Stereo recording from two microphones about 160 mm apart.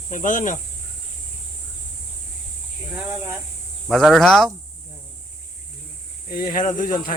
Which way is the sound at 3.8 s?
Centre (ahead or behind).